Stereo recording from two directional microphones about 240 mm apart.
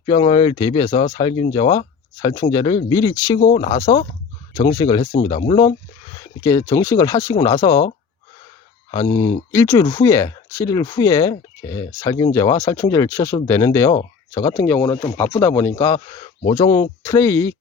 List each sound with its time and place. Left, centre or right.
0.0 s speech: left
4.5 s speech: centre
5.1 s speech: left
8.9 s speech: centre